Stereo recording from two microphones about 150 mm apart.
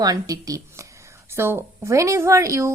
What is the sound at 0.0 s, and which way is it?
A woman's voice, 25° right (ahead or behind).